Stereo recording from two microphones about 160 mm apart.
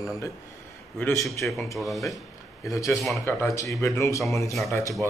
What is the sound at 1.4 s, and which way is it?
Speech, 10° left (ahead or behind).